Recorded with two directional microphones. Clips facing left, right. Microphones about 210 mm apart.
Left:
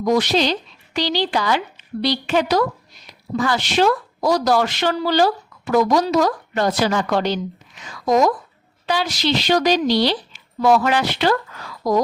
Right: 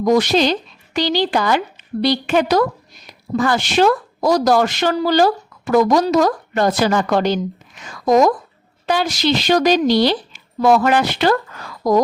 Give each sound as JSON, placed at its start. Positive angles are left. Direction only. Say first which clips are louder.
{"t": 0.0, "sound": "a woman's voice", "louder": "right 3 dB", "side_deg": -45}